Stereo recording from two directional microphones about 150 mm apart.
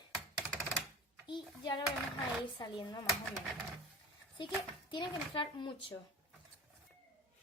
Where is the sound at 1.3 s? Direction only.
30° left (ahead or behind).